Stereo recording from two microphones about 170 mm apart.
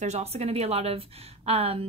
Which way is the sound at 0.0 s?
40° right (ahead or behind).